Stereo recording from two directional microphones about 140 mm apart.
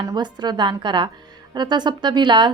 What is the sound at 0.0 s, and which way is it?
A woman's voice, 30° right (ahead or behind).